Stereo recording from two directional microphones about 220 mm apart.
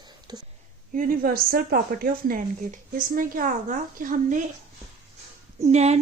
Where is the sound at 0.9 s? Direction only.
40° right (ahead or behind).